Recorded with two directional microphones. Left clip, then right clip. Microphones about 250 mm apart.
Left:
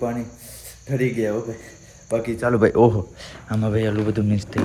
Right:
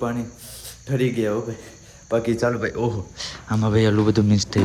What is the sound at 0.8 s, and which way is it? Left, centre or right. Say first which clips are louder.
Speech: even; centre.